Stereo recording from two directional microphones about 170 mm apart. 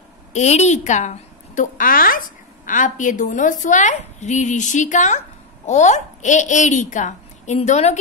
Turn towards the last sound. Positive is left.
turn(degrees=40)  # may be behind; listen again after turning